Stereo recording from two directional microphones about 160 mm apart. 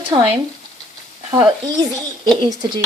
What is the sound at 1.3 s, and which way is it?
Speech, 25° right (ahead or behind).